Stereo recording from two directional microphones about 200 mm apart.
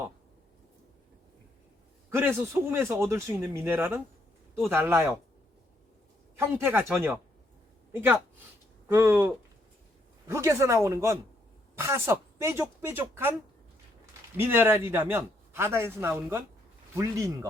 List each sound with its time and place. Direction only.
2.0 s a man's voice: 10° right (ahead or behind)
6.3 s a man's voice: 10° right (ahead or behind)
14.3 s a man's voice: 10° right (ahead or behind)